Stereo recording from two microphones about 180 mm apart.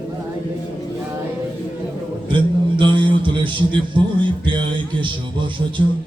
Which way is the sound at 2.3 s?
25° right (ahead or behind).